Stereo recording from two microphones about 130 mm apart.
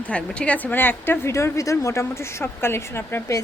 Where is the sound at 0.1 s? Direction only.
10° left (ahead or behind).